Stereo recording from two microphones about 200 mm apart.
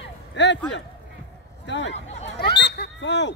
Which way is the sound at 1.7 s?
60° left (ahead or behind).